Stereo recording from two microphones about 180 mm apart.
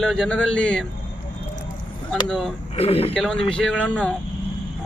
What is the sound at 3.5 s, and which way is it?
Speech, 5° left (ahead or behind).